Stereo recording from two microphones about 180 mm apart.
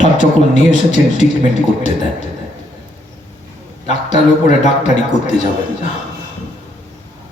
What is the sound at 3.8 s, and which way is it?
Speech, 40° left (ahead or behind).